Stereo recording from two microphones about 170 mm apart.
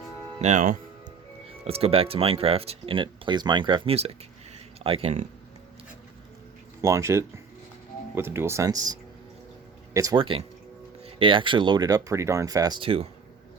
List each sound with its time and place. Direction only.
0.3 s speech: 45° right (ahead or behind)
1.5 s speech: 35° right (ahead or behind)
6.8 s speech: 15° right (ahead or behind); by 13.1 s 30° right (ahead or behind)